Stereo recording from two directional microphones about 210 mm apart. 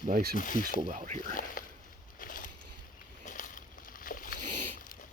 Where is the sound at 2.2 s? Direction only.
40° left (ahead or behind).